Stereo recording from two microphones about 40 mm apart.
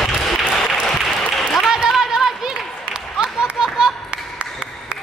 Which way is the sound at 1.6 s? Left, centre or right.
Centre.